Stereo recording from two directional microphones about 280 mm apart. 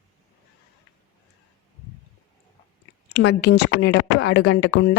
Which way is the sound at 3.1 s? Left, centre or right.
Left.